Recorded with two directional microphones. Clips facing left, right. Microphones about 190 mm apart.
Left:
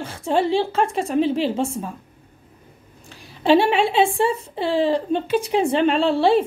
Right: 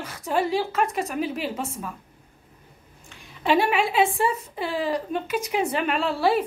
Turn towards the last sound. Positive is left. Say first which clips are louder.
# left 5 dB
turn(degrees=25)  # may be behind; listen again after turning